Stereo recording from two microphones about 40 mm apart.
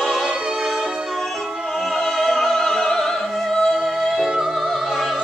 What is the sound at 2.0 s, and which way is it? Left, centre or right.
Opera, centre.